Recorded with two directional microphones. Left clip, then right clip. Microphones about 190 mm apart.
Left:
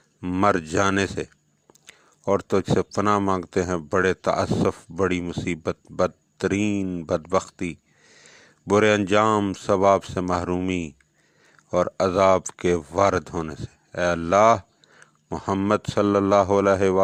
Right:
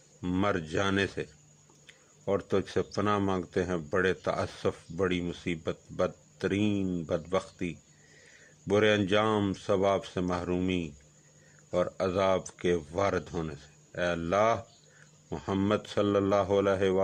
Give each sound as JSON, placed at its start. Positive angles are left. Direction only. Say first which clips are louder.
{"t": 0.2, "sound": "speech", "louder": "left 5 dB", "side_deg": 30}
{"t": 0.4, "sound": "speech", "louder": "left 10 dB", "side_deg": 40}